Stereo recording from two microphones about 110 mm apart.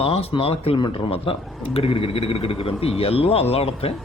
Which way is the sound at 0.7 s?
45° left (ahead or behind).